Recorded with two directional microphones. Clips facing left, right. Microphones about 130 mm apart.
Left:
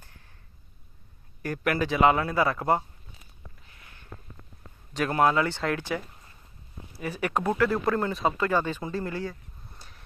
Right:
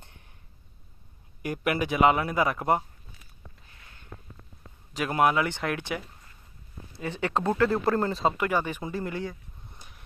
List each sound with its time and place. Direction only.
0.0 s a sound: 20° right (ahead or behind)
1.4 s speech: 15° right (ahead or behind)
4.9 s speech: 15° right (ahead or behind); by 8.4 s 30° right (ahead or behind)
8.4 s speech: 15° right (ahead or behind)